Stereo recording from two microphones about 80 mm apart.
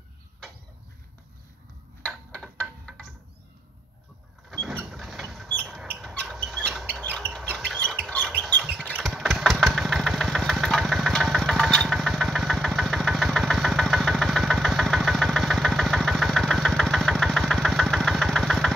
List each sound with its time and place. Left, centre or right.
2.0 s a sound: centre
4.5 s vehicle: centre
6.2 s rodents: centre
6.9 s bird: centre
7.6 s chicken: centre
8.4 s a sound: centre
9.0 s engine: centre